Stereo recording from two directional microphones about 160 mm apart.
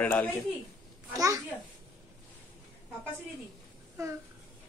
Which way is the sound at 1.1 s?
20° right (ahead or behind).